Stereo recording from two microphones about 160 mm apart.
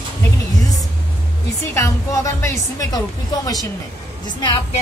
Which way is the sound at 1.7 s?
20° left (ahead or behind).